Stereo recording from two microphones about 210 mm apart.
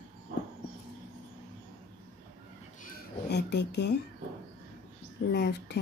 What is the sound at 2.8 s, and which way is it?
Speech, 50° left (ahead or behind).